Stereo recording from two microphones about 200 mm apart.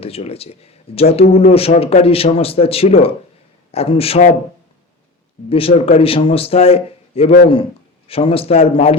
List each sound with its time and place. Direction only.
0.0 s a man's voice: 30° left (ahead or behind)
5.5 s a man's voice: 30° left (ahead or behind)
7.3 s a man's voice: 50° left (ahead or behind)
8.0 s a man's voice: 30° left (ahead or behind)